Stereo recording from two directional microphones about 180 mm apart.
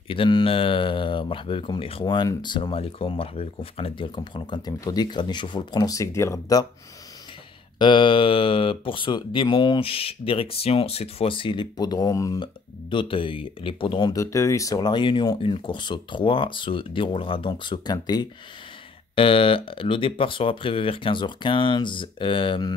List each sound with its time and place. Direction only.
0.1 s speech: 30° left (ahead or behind)
7.8 s speech: 25° left (ahead or behind)